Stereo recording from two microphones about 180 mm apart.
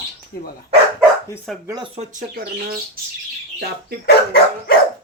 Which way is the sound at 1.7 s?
25° right (ahead or behind).